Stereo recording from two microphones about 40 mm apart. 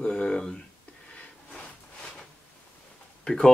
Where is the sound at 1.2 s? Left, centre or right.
Left.